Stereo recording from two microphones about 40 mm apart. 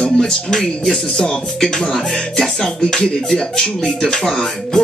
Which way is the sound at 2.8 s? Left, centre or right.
Left.